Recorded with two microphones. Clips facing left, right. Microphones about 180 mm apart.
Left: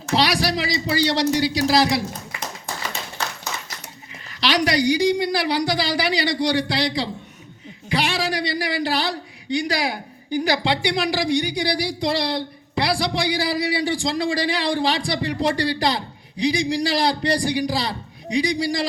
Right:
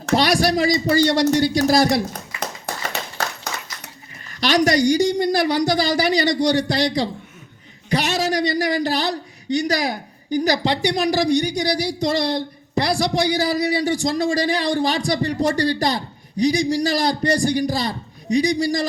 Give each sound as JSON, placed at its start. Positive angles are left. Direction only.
{"t": 0.1, "sound": "a man's voice", "side_deg": -45}
{"t": 2.6, "sound": "a sound", "side_deg": -65}
{"t": 4.4, "sound": "a man's voice", "side_deg": -45}